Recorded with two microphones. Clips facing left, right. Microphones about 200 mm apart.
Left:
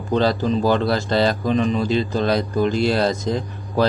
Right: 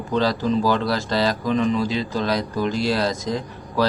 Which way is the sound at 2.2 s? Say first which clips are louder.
Left 2 dB; 55° left (ahead or behind).